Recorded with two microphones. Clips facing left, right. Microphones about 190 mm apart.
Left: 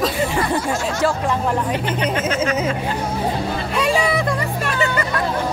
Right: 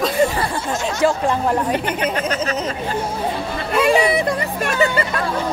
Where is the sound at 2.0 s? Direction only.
40° right (ahead or behind).